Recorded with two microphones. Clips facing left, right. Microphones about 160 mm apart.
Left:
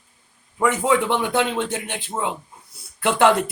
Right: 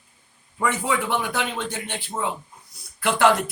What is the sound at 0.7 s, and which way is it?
Speech, 20° left (ahead or behind).